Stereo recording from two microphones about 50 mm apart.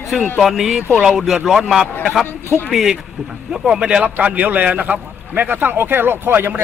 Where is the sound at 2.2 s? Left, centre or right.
Left.